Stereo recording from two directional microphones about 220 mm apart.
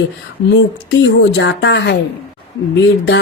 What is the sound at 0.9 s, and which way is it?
Speech, 55° left (ahead or behind).